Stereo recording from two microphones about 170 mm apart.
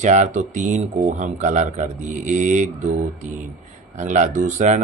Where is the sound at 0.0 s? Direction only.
45° right (ahead or behind).